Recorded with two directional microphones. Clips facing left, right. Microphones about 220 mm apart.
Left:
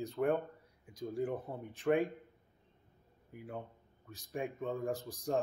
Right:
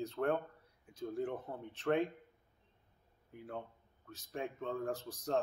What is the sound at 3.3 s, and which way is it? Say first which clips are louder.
Speech: left 1 dB; 15° left (ahead or behind).